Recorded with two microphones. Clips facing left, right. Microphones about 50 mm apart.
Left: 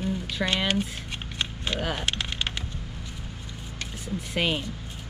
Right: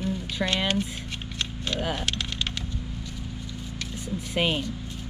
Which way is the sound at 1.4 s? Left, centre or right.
Centre.